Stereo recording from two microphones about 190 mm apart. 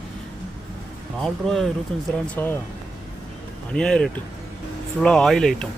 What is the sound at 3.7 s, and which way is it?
Speech, 5° left (ahead or behind).